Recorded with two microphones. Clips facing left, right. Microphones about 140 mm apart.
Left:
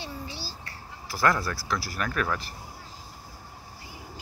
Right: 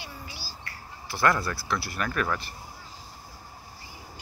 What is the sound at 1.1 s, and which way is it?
Speech, 5° left (ahead or behind).